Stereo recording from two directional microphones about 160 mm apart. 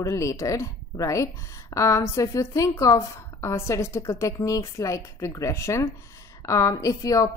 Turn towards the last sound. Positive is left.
turn(degrees=20)  # may be behind; listen again after turning